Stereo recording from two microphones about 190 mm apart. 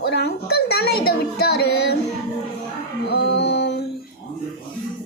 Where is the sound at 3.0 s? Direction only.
65° left (ahead or behind).